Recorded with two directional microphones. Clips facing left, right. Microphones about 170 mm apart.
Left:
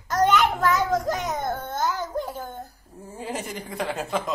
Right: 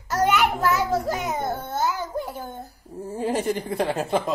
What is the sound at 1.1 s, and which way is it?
Babbling, 10° right (ahead or behind).